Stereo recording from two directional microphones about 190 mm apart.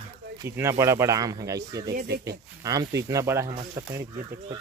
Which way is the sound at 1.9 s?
55° right (ahead or behind).